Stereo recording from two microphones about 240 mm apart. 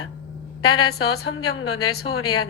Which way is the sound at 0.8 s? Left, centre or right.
Left.